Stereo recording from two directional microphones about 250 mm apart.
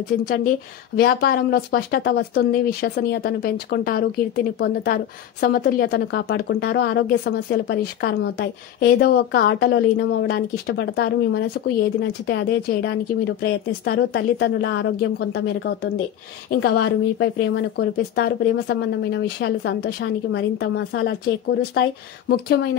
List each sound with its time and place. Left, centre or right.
0.9 s a woman's voice: left